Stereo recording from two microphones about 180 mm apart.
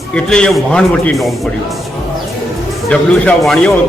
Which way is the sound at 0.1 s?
5° left (ahead or behind).